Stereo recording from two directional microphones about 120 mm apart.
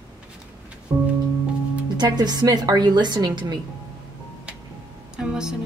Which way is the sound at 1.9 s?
35° right (ahead or behind).